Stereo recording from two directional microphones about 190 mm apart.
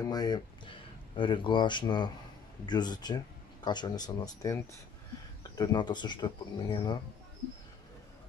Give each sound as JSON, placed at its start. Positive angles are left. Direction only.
{"t": 0.0, "sound": "speech", "side_deg": 20}
{"t": 5.6, "sound": "speech", "side_deg": 20}